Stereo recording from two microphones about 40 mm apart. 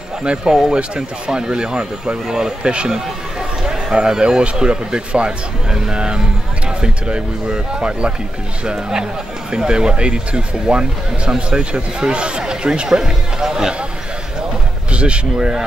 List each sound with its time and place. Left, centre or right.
0.4 s speech: centre
9.5 s speech: right
14.9 s speech: right